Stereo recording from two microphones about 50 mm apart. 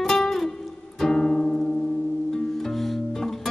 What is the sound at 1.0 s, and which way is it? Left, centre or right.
Guitar, centre.